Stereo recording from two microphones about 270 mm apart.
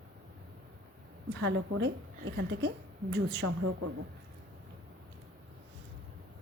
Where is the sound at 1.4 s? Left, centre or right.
Right.